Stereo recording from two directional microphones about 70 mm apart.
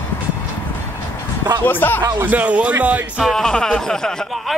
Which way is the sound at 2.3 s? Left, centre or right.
Right.